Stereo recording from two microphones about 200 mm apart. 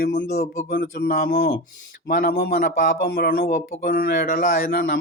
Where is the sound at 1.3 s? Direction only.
60° left (ahead or behind).